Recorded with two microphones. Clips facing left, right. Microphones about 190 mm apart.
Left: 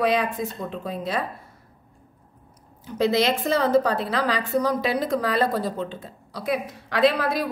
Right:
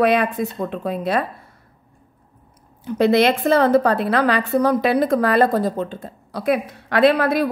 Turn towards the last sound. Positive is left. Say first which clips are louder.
# right 5 dB
turn(degrees=-60)  # may be behind; listen again after turning